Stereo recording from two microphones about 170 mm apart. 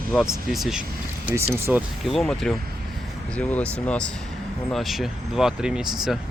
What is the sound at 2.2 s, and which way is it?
Speech, 5° left (ahead or behind).